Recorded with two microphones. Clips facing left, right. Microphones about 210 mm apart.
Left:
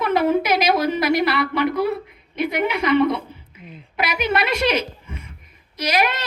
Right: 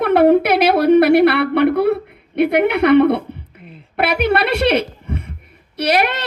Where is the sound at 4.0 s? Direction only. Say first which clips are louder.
Right 6 dB; 60° right (ahead or behind).